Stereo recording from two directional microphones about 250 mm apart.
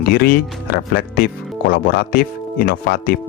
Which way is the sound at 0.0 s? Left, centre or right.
Left.